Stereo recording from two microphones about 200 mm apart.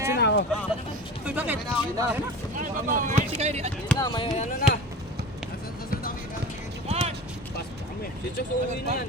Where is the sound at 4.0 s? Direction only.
20° left (ahead or behind).